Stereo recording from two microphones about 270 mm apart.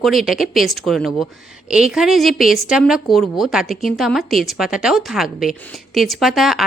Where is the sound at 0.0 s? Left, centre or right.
Centre.